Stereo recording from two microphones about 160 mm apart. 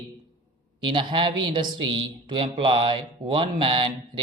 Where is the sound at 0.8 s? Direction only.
30° right (ahead or behind).